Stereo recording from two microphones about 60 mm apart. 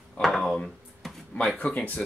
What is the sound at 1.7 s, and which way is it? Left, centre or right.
Speech, left.